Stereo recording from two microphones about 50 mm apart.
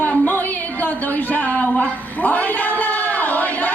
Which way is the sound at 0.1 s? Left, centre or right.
Left.